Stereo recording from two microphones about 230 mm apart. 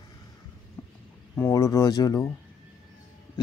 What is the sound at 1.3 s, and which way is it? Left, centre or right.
Speech, centre.